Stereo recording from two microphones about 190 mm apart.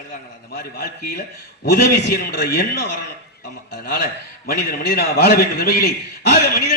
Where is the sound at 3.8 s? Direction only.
55° left (ahead or behind).